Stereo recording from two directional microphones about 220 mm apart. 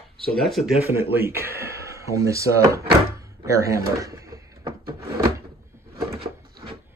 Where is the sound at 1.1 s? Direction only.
10° right (ahead or behind).